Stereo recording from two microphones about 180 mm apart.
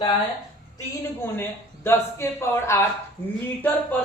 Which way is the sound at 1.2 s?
15° left (ahead or behind).